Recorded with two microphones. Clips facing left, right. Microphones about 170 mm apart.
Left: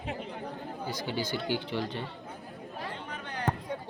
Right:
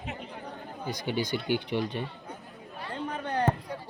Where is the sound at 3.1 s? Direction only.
35° right (ahead or behind).